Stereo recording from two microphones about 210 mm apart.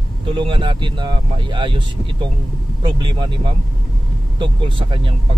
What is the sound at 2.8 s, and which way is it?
Speech, 20° right (ahead or behind).